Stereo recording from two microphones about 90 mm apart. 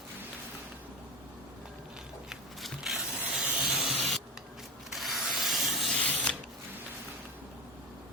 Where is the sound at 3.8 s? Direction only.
Centre (ahead or behind).